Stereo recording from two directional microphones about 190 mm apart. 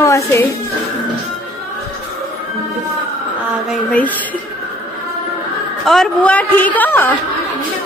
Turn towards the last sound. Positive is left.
turn(degrees=10)  # may be behind; listen again after turning